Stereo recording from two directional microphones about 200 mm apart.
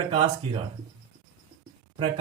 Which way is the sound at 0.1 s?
25° right (ahead or behind).